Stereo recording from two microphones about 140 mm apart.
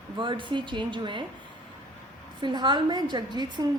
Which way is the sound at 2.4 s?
35° right (ahead or behind).